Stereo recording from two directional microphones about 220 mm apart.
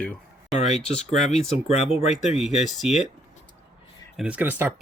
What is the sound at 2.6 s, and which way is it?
Speech, centre (ahead or behind).